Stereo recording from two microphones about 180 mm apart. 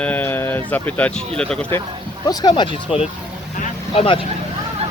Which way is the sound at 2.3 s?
20° left (ahead or behind).